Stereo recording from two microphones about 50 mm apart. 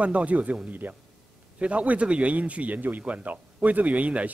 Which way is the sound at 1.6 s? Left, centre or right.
Right.